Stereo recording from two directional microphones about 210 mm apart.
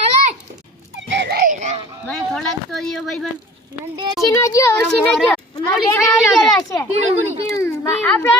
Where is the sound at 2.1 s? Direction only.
5° left (ahead or behind).